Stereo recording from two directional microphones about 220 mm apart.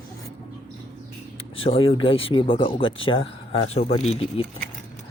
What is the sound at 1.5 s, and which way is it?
Speech, 25° left (ahead or behind).